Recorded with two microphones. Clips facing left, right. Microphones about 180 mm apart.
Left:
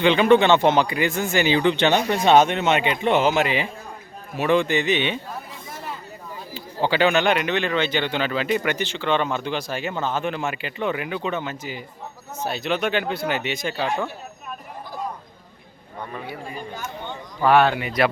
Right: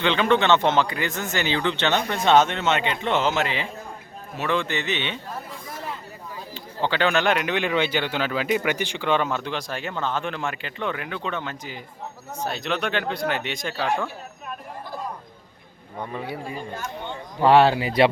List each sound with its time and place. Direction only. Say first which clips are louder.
0.0 s speech: left 5 dB; 10° left (ahead or behind)
6.5 s speech: left 3 dB; 5° left (ahead or behind)
16.7 s speech: even; centre (ahead or behind)
17.4 s speech: right 1 dB; 30° right (ahead or behind)